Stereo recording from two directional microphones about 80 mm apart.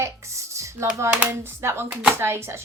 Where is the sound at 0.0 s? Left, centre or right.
Right.